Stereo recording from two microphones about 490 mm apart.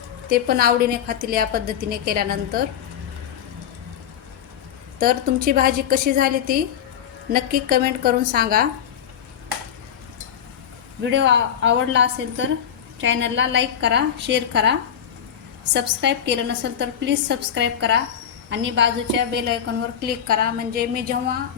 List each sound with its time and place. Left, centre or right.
0.3 s a woman's voice: centre
4.9 s a woman's voice: centre
11.0 s a woman's voice: right